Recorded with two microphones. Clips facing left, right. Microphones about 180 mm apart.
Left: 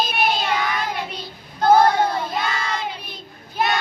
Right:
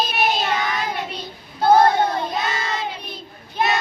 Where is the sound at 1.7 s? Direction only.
10° left (ahead or behind).